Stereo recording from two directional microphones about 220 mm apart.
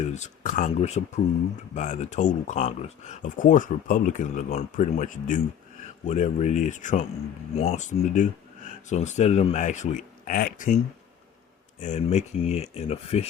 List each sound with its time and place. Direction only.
0.0 s speech: 35° left (ahead or behind)
11.8 s speech: 30° left (ahead or behind)